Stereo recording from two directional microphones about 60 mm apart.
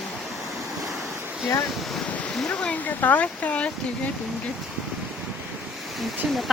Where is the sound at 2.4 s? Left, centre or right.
Centre.